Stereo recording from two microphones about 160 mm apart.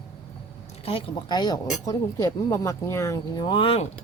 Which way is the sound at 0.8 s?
35° left (ahead or behind).